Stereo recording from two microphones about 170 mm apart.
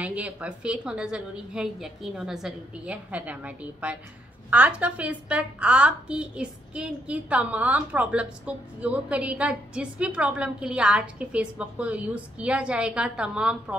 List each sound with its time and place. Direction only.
0.0 s a woman's voice: 10° right (ahead or behind)